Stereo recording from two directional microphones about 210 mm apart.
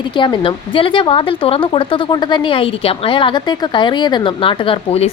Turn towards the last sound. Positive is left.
turn(degrees=25)  # may be behind; listen again after turning